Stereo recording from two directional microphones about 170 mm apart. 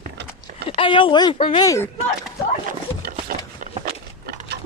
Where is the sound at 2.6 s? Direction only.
50° right (ahead or behind).